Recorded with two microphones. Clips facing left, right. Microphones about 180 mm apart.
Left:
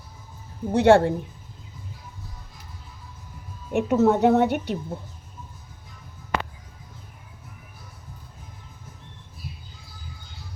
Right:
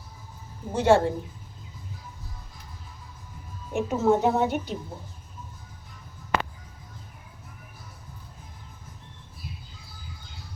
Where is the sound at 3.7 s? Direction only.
65° left (ahead or behind).